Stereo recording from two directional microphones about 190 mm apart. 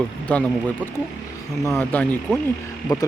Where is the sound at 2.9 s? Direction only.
20° left (ahead or behind).